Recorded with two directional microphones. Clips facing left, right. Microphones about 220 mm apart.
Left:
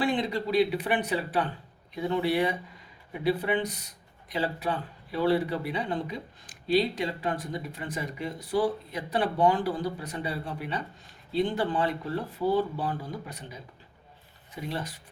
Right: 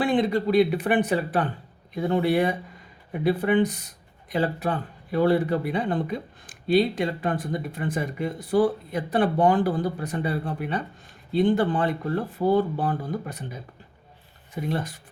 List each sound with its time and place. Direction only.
0.0 s speech: 50° right (ahead or behind)